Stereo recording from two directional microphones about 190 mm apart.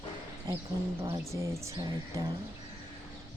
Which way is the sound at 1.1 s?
15° right (ahead or behind).